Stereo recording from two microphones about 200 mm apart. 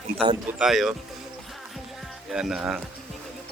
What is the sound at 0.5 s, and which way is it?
Speech, centre (ahead or behind).